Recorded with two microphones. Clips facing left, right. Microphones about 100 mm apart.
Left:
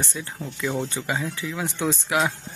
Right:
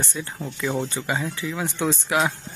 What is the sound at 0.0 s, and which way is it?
Speech, centre (ahead or behind).